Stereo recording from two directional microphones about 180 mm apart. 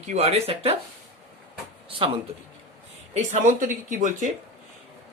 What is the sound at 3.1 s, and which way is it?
Speech, 45° right (ahead or behind).